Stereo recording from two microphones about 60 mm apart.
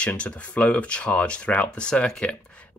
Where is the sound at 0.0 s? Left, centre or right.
Left.